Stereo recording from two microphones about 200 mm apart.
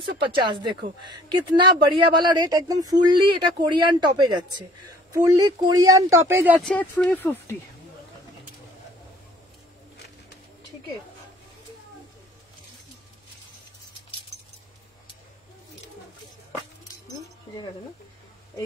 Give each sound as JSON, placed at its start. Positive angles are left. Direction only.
{"t": 0.0, "sound": "speech", "side_deg": -25}
{"t": 6.6, "sound": "speech", "side_deg": 5}